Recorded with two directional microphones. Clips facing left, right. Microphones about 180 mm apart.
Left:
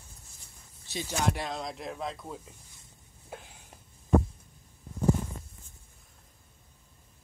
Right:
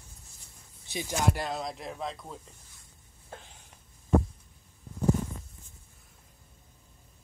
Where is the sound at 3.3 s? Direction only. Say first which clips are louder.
Left 2 dB; 10° left (ahead or behind).